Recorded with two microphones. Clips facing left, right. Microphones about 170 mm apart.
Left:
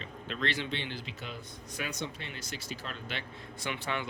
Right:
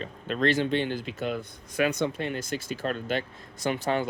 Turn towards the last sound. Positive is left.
turn(degrees=-40)  # may be behind; listen again after turning